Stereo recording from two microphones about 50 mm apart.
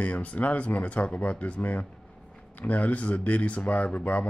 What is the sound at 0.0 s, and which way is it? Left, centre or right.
A man's voice, left.